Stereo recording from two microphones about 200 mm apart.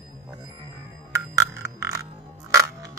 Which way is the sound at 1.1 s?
15° right (ahead or behind).